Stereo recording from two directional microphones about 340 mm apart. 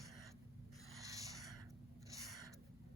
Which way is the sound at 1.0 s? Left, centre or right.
Centre.